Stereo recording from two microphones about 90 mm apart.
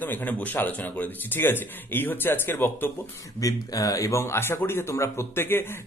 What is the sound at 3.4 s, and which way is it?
Speech, 40° left (ahead or behind).